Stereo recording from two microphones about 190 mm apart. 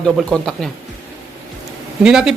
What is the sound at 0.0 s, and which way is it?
Speech, 5° left (ahead or behind).